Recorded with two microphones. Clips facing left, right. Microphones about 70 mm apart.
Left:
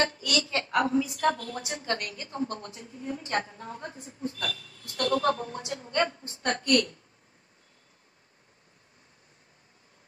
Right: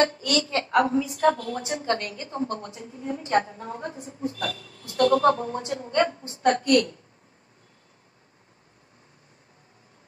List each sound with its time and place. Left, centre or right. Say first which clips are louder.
0.0 s a woman's voice: right 5 dB; right